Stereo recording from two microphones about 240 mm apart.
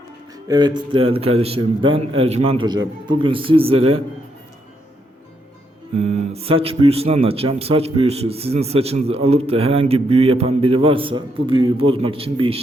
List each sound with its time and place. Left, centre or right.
0.4 s speech: centre
5.9 s speech: right